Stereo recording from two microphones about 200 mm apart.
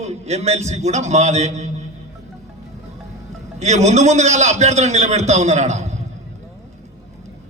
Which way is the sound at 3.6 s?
35° right (ahead or behind).